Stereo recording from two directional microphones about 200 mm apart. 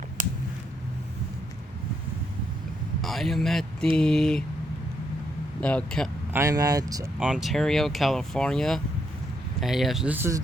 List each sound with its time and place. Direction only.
3.0 s speech: centre (ahead or behind)
5.5 s speech: 5° left (ahead or behind)
6.3 s speech: 15° right (ahead or behind)
7.2 s speech: 5° right (ahead or behind)